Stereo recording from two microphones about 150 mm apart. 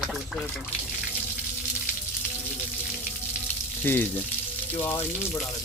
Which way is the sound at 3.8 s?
15° left (ahead or behind).